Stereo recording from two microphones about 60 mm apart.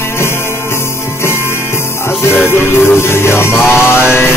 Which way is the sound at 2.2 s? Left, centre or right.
Left.